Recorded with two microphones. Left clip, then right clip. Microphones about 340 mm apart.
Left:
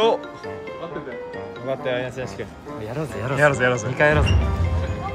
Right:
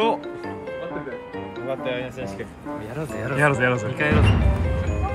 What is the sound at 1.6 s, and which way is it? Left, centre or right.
Speech, left.